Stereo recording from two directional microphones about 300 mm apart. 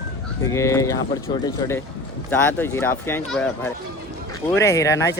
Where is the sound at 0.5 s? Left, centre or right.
Centre.